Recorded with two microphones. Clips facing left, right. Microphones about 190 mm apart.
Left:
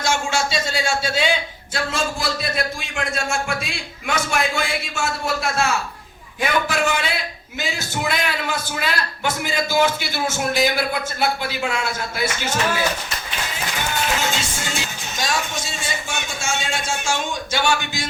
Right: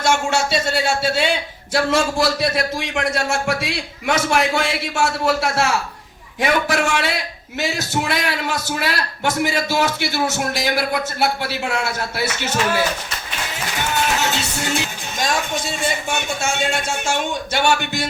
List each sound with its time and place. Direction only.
0.0 s speech: 65° right (ahead or behind)
14.3 s music: 65° right (ahead or behind)
15.2 s speech: 55° right (ahead or behind)